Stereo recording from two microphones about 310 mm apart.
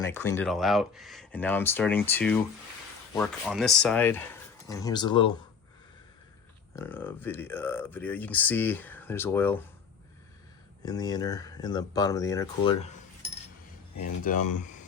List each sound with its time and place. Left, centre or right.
0.0 s speech: centre
6.7 s speech: centre
10.8 s speech: centre
14.2 s speech: left